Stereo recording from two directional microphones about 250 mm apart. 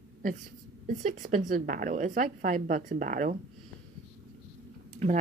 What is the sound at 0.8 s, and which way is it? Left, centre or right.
A woman's voice, right.